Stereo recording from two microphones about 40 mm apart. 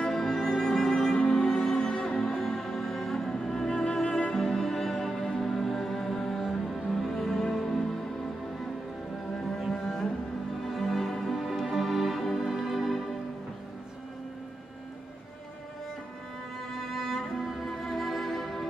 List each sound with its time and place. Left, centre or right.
0.1 s music: centre
9.4 s cello: centre
10.6 s music: centre
16.7 s music: centre